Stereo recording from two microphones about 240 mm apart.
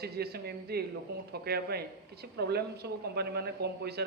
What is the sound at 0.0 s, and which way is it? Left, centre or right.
Speech, right.